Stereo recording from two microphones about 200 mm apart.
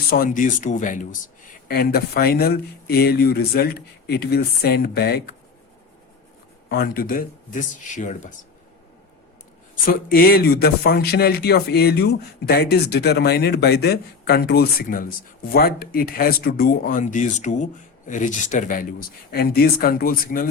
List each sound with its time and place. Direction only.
0.1 s speech: 45° left (ahead or behind)
1.6 s speech: 50° left (ahead or behind)
6.7 s speech: 50° left (ahead or behind)
9.8 s speech: 45° left (ahead or behind)